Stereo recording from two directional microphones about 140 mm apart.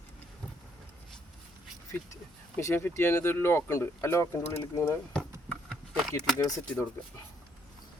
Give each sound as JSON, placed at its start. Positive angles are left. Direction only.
{"t": 2.6, "sound": "speech", "side_deg": 20}
{"t": 5.1, "sound": "a sound", "side_deg": 5}
{"t": 6.4, "sound": "speech", "side_deg": 25}